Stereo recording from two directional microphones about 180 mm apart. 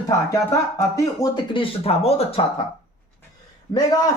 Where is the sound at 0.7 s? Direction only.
15° left (ahead or behind).